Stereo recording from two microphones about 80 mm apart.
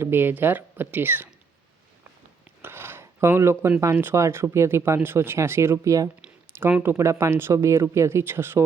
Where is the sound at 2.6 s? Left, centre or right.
Right.